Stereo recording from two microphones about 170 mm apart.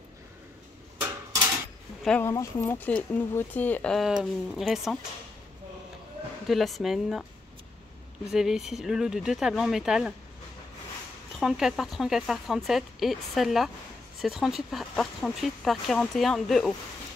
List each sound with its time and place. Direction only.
1.0 s a sound: 20° right (ahead or behind)
2.0 s speech: 10° left (ahead or behind)
6.4 s speech: centre (ahead or behind)
8.3 s speech: centre (ahead or behind)
11.3 s speech: 5° right (ahead or behind)